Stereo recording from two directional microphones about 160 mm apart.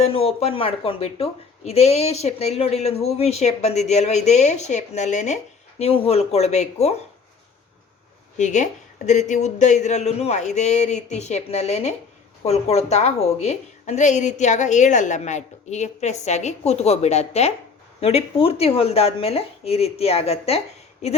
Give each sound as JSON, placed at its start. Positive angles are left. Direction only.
{"t": 0.0, "sound": "a woman's voice", "side_deg": 35}
{"t": 8.4, "sound": "a woman's voice", "side_deg": 50}